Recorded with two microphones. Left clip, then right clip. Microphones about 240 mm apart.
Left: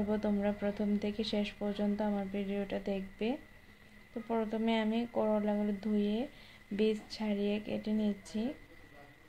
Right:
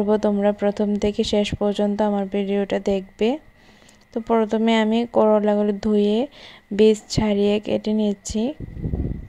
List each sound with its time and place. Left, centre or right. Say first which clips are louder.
0.1 s speech: right 16 dB; right